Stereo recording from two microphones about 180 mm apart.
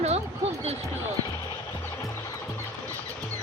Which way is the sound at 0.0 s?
35° right (ahead or behind).